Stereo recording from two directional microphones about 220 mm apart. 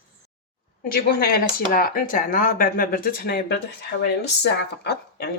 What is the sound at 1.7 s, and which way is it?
Speech, 40° left (ahead or behind).